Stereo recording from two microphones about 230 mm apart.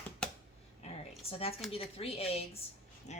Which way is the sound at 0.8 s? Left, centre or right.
Left.